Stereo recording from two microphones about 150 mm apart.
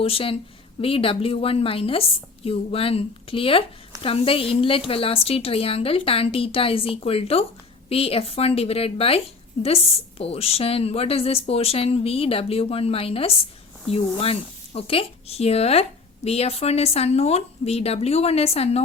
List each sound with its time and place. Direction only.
0.0 s a woman's voice: 40° left (ahead or behind)